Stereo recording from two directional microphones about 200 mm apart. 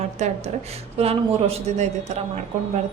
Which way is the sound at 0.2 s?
35° right (ahead or behind).